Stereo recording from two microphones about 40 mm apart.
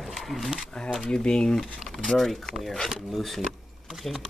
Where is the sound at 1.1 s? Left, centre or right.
Left.